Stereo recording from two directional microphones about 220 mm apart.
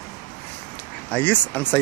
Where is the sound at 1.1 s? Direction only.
5° left (ahead or behind).